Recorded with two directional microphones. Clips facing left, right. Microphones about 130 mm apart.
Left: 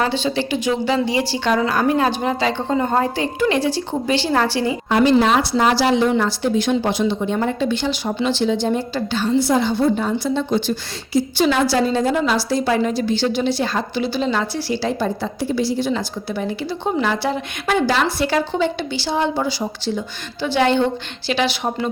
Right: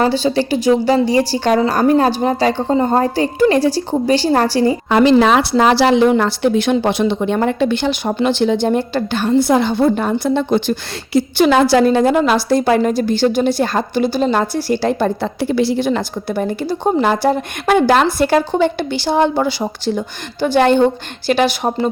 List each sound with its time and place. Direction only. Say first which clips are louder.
0.0 s a woman's voice: right 5 dB; 35° right (ahead or behind)
4.9 s a woman's voice: right 3 dB; 85° right; by 21.8 s 45° right (ahead or behind)